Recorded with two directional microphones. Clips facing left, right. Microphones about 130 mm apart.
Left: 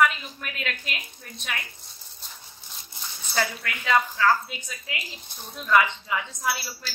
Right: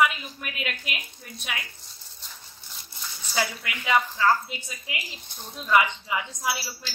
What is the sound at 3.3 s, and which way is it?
Speech, 10° right (ahead or behind).